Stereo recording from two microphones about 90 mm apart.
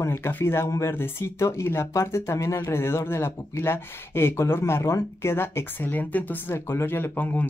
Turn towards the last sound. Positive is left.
turn(degrees=20)  # may be behind; listen again after turning